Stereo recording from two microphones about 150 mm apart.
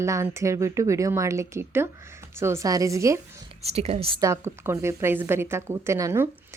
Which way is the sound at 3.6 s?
40° right (ahead or behind).